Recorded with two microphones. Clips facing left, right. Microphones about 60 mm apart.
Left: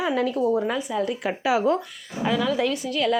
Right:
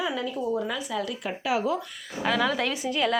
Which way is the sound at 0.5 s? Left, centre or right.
Left.